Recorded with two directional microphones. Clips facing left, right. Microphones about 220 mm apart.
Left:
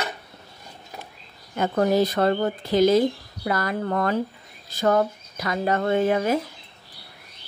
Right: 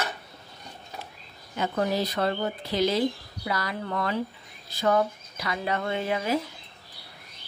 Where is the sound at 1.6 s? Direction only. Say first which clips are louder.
Left 6 dB; 50° left (ahead or behind).